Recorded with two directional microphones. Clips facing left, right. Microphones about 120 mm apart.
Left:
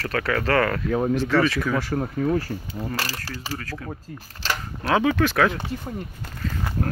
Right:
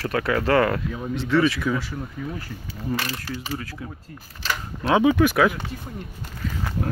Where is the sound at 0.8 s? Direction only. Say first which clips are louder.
Left 6 dB; 60° left (ahead or behind).